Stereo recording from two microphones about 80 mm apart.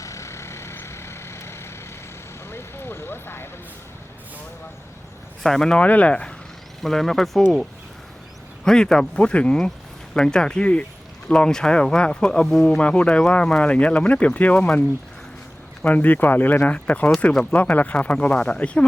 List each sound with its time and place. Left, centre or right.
0.0 s vehicle: left
5.4 s speech: centre
6.8 s speech: centre